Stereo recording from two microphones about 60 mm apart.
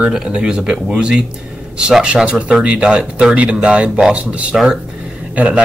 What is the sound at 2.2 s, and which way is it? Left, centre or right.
Speech, right.